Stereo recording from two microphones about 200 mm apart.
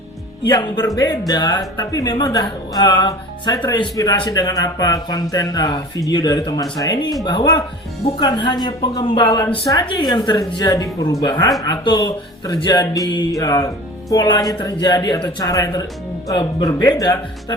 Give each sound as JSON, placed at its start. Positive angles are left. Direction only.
{"t": 0.5, "sound": "speech", "side_deg": 20}
{"t": 10.6, "sound": "music", "side_deg": 15}
{"t": 11.6, "sound": "speech", "side_deg": 20}
{"t": 13.1, "sound": "music", "side_deg": 20}
{"t": 14.1, "sound": "speech", "side_deg": 20}
{"t": 15.4, "sound": "music", "side_deg": 15}
{"t": 16.3, "sound": "speech", "side_deg": 20}